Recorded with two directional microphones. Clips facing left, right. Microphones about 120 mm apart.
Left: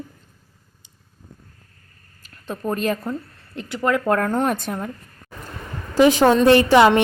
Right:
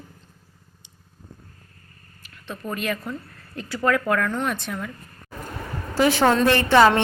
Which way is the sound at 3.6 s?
20° left (ahead or behind).